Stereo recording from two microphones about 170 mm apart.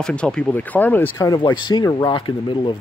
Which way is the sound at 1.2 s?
25° left (ahead or behind).